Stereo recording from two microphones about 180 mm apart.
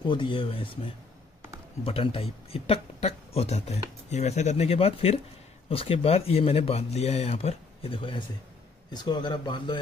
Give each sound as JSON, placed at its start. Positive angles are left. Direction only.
{"t": 0.0, "sound": "speech", "side_deg": 25}
{"t": 1.9, "sound": "speech", "side_deg": 30}